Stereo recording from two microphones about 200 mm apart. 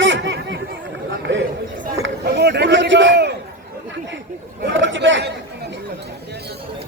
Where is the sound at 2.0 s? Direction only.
60° right (ahead or behind).